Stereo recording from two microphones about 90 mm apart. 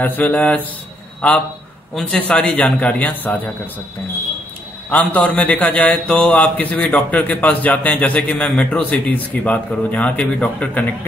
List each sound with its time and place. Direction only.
0.0 s a man's voice: 20° left (ahead or behind)
4.8 s a man's voice: 15° left (ahead or behind)